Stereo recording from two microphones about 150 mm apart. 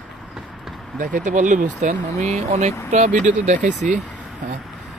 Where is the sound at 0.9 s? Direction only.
60° right (ahead or behind).